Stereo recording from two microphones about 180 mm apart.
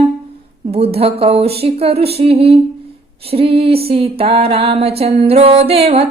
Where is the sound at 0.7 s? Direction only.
35° right (ahead or behind).